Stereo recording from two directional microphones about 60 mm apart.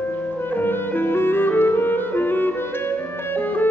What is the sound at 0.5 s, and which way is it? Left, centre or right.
Music, left.